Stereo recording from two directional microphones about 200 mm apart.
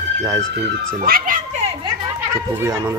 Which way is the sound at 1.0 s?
45° right (ahead or behind).